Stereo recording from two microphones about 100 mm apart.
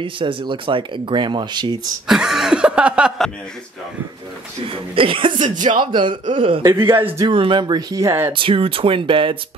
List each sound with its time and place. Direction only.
0.0 s speech: 55° right (ahead or behind)
2.0 s a sound: 5° right (ahead or behind)
4.6 s speech: 65° right (ahead or behind)
6.6 s a man's voice: 25° right (ahead or behind)
7.2 s speech: 55° right (ahead or behind); by 8.3 s 30° right (ahead or behind)
8.3 s speech: 60° right (ahead or behind)